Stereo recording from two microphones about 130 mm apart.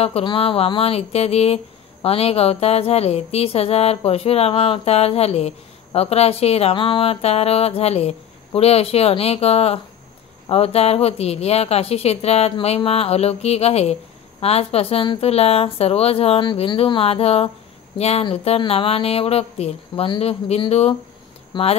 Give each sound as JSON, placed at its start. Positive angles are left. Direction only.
{"t": 0.0, "sound": "speech", "side_deg": 45}
{"t": 21.5, "sound": "speech", "side_deg": 35}